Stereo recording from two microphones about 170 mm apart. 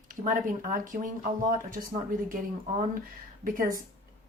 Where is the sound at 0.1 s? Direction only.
50° right (ahead or behind).